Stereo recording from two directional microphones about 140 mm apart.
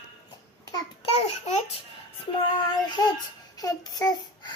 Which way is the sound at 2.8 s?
30° left (ahead or behind).